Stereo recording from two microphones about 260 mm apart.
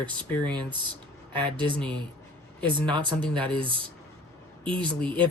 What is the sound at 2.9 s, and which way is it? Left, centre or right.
Speech, centre.